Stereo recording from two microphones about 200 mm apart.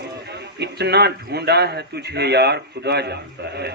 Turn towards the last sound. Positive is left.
turn(degrees=-55)  # may be behind; listen again after turning